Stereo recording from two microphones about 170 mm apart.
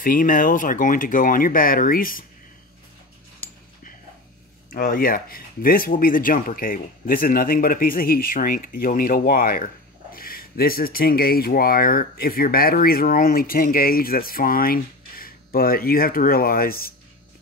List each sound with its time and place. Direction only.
0.0 s speech: 55° left (ahead or behind)
4.6 s speech: 60° left (ahead or behind)